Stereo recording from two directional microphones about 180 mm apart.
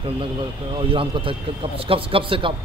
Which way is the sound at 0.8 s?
30° right (ahead or behind).